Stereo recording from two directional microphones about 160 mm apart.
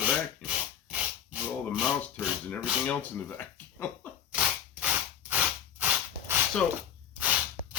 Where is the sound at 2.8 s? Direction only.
10° left (ahead or behind).